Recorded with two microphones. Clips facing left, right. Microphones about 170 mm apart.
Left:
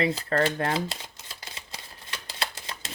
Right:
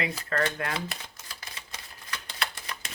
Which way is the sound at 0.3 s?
30° left (ahead or behind).